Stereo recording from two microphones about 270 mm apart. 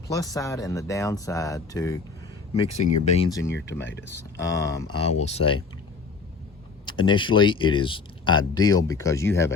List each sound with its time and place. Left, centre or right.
0.1 s speech: centre
2.5 s speech: left
5.1 s speech: left
6.8 s speech: centre